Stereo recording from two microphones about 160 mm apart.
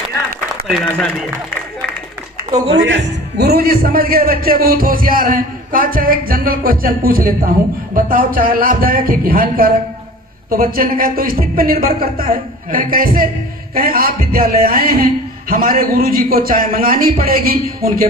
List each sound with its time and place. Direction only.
0.9 s a man's voice: 10° left (ahead or behind)
2.5 s speech: 40° right (ahead or behind)
3.0 s speech: 85° right; by 18.1 s 65° right (ahead or behind)